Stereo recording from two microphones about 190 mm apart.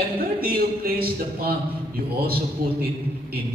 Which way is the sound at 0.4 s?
50° right (ahead or behind).